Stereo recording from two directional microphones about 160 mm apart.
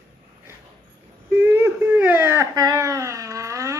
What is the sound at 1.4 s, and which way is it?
Baby cry, 15° right (ahead or behind).